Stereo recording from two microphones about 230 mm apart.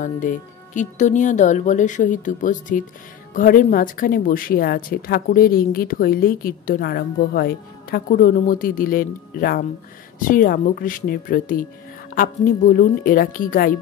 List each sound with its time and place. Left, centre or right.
0.0 s speech: left